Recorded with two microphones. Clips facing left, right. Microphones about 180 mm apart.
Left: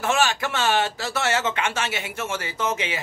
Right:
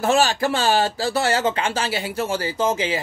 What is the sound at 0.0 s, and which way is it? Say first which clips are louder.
Speech: right 4 dB; 35° right (ahead or behind).